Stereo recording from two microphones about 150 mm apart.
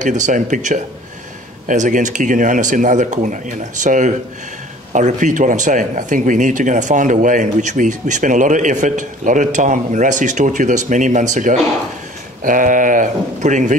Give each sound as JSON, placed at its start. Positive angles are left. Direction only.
{"t": 0.0, "sound": "speech", "side_deg": -55}